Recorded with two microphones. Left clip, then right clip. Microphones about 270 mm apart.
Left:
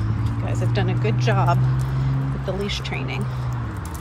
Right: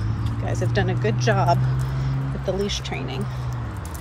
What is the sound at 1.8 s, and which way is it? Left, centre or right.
Vehicle, centre.